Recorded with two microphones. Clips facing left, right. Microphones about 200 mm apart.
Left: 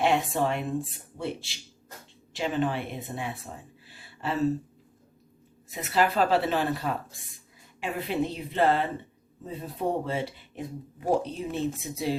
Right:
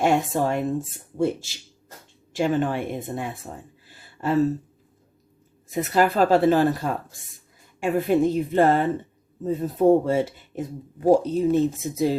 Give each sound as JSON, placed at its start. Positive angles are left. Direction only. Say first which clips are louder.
{"t": 0.0, "sound": "speech", "louder": "right 4 dB", "side_deg": -45}
{"t": 3.8, "sound": "a sound", "louder": "right 7 dB", "side_deg": -45}
{"t": 5.7, "sound": "speech", "louder": "right 5 dB", "side_deg": -45}